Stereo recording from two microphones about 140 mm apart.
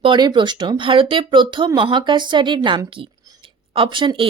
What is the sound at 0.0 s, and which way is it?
Speech, 35° right (ahead or behind).